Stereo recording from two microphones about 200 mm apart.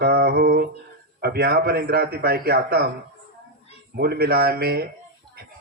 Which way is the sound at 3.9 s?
50° right (ahead or behind).